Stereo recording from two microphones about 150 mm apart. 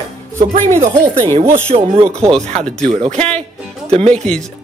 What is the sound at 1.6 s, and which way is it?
Speech, 40° right (ahead or behind).